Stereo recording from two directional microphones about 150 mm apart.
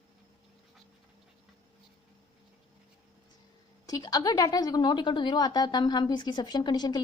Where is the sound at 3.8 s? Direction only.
25° left (ahead or behind).